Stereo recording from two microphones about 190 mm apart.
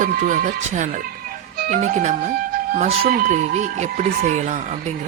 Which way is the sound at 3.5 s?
35° right (ahead or behind).